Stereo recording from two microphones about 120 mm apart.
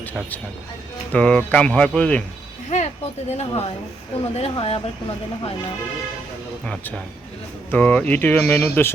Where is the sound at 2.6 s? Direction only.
75° left (ahead or behind); by 5.1 s 50° left (ahead or behind).